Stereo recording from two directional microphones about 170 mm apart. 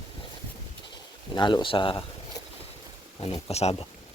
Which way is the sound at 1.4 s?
25° left (ahead or behind).